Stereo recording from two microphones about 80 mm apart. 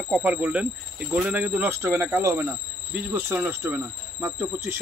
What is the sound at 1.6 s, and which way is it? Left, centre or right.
Speech, right.